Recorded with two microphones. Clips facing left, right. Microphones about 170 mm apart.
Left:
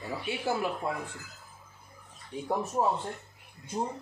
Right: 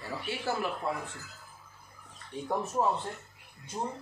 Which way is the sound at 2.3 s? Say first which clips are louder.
Left 1 dB; 10° left (ahead or behind).